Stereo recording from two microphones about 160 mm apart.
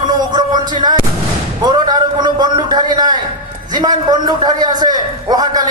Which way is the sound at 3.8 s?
25° right (ahead or behind).